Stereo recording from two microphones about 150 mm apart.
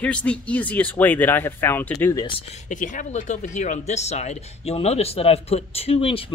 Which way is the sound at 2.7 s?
60° left (ahead or behind).